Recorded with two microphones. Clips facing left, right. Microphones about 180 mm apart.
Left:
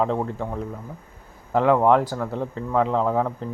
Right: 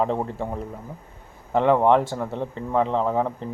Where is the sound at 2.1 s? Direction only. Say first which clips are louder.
Even; 15° right (ahead or behind).